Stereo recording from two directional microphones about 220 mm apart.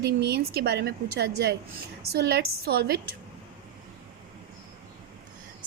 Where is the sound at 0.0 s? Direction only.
50° right (ahead or behind).